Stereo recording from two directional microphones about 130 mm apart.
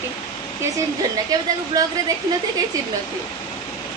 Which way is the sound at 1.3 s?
30° right (ahead or behind).